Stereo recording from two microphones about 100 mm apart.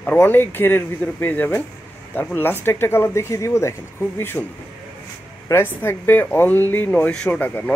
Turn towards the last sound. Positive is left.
turn(degrees=15)  # may be behind; listen again after turning